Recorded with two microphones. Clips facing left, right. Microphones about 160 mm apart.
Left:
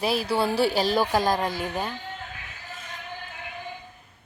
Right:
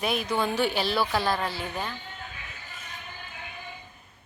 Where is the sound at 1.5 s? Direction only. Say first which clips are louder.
Left 4 dB; 15° left (ahead or behind).